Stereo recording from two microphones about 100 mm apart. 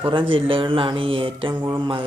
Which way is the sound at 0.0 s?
55° right (ahead or behind).